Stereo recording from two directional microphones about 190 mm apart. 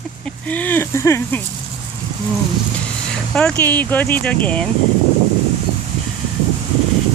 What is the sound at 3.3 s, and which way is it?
Speech, 5° left (ahead or behind).